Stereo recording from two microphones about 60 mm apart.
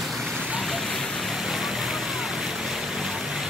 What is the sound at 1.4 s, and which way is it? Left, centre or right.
Vehicle, centre.